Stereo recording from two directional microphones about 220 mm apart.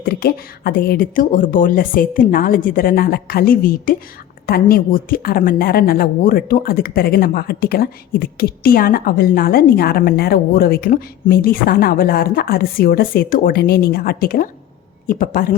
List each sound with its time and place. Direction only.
0.0 s speech: 45° left (ahead or behind)